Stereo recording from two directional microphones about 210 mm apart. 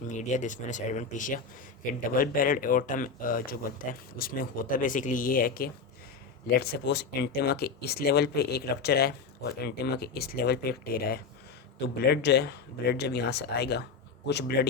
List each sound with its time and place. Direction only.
0.1 s speech: 35° left (ahead or behind)